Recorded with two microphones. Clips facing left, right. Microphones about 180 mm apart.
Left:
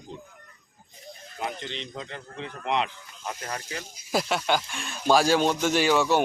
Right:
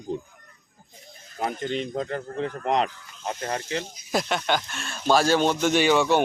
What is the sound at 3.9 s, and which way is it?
Speech, 5° left (ahead or behind).